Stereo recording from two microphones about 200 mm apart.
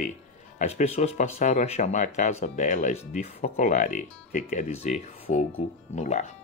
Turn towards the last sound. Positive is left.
turn(degrees=35)  # may be behind; listen again after turning